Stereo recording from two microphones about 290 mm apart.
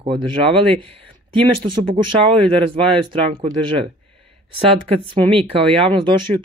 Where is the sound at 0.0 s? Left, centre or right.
Centre.